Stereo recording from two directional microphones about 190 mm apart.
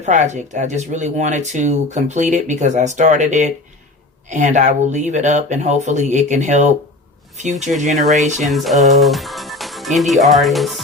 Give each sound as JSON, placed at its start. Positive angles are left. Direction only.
{"t": 0.0, "sound": "speech", "side_deg": -40}
{"t": 8.4, "sound": "speech", "side_deg": 0}